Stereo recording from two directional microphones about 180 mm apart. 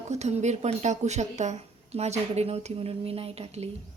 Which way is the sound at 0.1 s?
40° right (ahead or behind).